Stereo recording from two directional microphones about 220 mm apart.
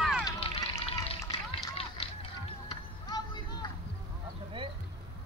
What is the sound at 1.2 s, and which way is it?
Run, 15° left (ahead or behind).